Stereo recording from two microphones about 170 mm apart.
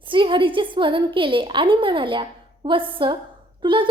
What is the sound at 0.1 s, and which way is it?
A woman's voice, 30° right (ahead or behind).